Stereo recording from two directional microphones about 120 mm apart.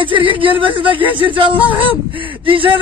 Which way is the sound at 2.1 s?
45° right (ahead or behind).